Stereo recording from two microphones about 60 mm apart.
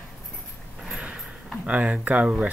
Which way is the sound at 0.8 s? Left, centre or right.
Centre.